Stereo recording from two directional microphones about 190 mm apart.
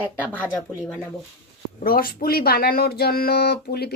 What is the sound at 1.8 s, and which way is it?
A woman's voice, 50° left (ahead or behind).